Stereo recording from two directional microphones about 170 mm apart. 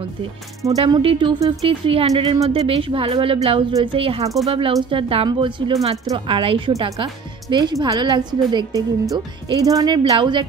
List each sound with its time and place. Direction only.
0.8 s speech: 25° right (ahead or behind)